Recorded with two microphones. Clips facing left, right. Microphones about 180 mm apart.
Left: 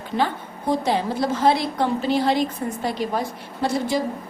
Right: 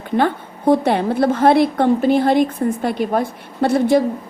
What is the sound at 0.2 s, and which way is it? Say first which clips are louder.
A woman's voice: right 5 dB; 55° right (ahead or behind).